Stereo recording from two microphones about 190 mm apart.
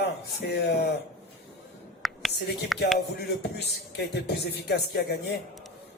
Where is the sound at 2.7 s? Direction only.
Centre (ahead or behind).